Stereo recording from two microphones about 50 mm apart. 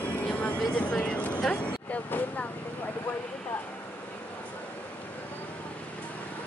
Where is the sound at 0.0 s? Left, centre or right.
Left.